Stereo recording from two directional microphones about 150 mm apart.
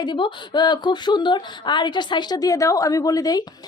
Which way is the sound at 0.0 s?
30° left (ahead or behind).